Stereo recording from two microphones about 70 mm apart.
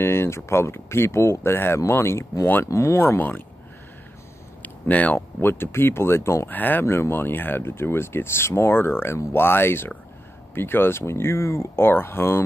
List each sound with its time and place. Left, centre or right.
0.0 s speech: left
3.2 s speech: left
4.6 s speech: left
6.5 s speech: left